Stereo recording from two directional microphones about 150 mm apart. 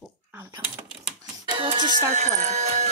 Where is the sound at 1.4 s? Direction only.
35° right (ahead or behind).